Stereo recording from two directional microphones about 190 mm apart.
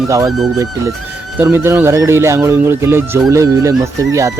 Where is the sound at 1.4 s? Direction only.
15° right (ahead or behind).